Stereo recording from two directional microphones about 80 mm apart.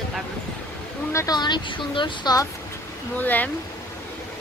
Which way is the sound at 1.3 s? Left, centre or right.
Left.